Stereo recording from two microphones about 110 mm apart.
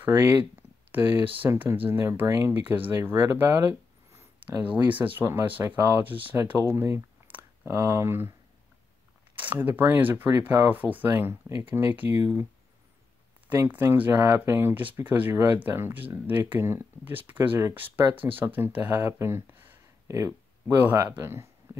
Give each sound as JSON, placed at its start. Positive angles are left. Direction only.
{"t": 0.0, "sound": "speech", "side_deg": -20}
{"t": 4.4, "sound": "speech", "side_deg": -15}
{"t": 6.3, "sound": "a sound", "side_deg": -20}
{"t": 7.7, "sound": "speech", "side_deg": -30}
{"t": 9.3, "sound": "speech", "side_deg": -15}
{"t": 13.5, "sound": "speech", "side_deg": -20}
{"t": 21.7, "sound": "a sound", "side_deg": -25}